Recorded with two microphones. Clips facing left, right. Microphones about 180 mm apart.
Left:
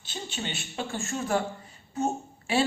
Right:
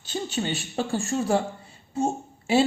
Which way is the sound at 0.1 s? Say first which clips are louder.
Right 7 dB; 40° right (ahead or behind).